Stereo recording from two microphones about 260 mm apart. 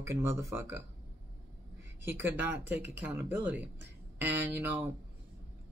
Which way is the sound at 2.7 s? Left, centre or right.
Right.